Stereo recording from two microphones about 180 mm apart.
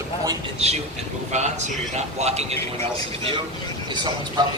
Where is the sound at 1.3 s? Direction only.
40° right (ahead or behind).